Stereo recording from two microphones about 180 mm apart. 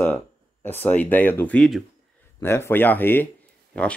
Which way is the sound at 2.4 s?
15° left (ahead or behind).